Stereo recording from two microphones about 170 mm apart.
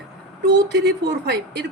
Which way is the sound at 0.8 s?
90° right.